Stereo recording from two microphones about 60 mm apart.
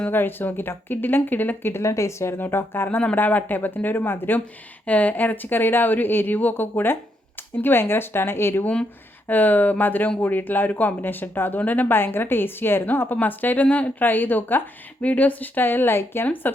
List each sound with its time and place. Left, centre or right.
0.1 s speech: left
1.9 s speech: left
2.4 s speech: left
4.9 s speech: left
8.6 s speech: centre
9.2 s speech: left